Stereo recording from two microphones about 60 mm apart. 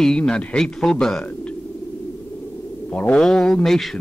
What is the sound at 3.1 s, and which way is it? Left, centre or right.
Speech, centre.